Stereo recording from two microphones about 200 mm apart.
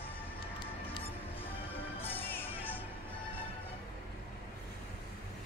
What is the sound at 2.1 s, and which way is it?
Music, 10° left (ahead or behind).